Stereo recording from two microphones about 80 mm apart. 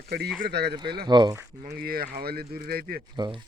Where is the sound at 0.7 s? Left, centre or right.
Right.